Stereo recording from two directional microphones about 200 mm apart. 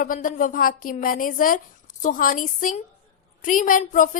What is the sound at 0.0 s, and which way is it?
A woman's voice, 45° left (ahead or behind).